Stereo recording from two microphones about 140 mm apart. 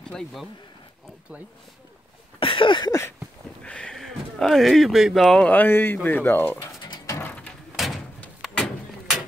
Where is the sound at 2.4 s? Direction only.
35° left (ahead or behind).